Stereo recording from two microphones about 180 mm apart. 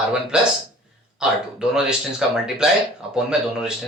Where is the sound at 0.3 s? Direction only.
5° right (ahead or behind).